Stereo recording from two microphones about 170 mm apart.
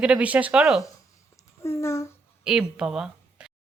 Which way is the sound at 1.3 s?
15° left (ahead or behind).